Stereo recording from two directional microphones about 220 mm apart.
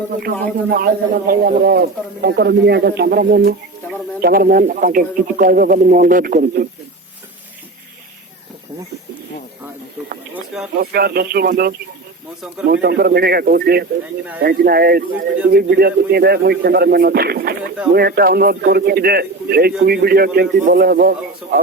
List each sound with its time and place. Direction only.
0.7 s a man's voice: 40° right (ahead or behind)
10.3 s a sound: centre (ahead or behind)
10.8 s a man's voice: 45° right (ahead or behind)